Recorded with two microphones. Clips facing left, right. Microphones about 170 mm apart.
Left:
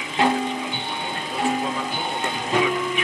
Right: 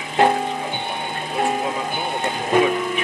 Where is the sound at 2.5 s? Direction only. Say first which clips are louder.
Right 5 dB; 50° right (ahead or behind).